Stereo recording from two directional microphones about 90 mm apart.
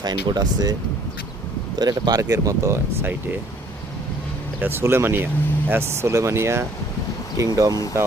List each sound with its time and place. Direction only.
0.0 s speech: 50° right (ahead or behind)
1.8 s speech: 45° right (ahead or behind)
4.6 s speech: 25° right (ahead or behind)
7.3 s speech: 40° right (ahead or behind)